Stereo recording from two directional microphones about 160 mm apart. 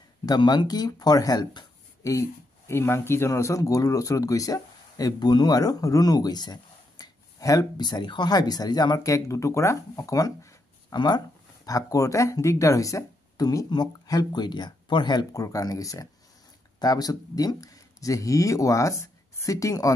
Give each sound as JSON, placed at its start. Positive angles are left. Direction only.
{"t": 0.2, "sound": "speech", "side_deg": 25}